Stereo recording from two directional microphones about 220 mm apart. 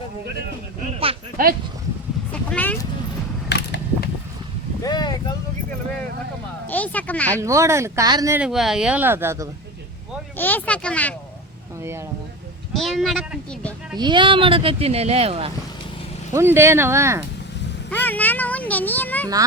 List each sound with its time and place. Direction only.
1.4 s speech: 40° right (ahead or behind)
2.3 s vehicle: 5° left (ahead or behind)
3.5 s a sound: 50° left (ahead or behind)
4.8 s a sound: 20° left (ahead or behind)
6.7 s a sound: 5° left (ahead or behind)
7.4 s speech: 15° right (ahead or behind)
8.4 s speech: centre (ahead or behind)
10.3 s speech: 10° left (ahead or behind)
11.8 s speech: 10° right (ahead or behind)
12.7 s speech: centre (ahead or behind)
13.9 s speech: 20° right (ahead or behind)
16.3 s speech: 10° right (ahead or behind)
17.9 s a sound: 10° left (ahead or behind)